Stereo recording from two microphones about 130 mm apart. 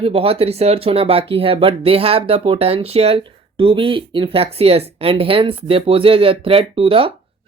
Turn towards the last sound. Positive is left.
turn(degrees=-45)  # may be behind; listen again after turning